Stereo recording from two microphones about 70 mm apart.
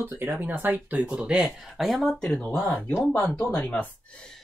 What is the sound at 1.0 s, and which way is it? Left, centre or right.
Speech, centre.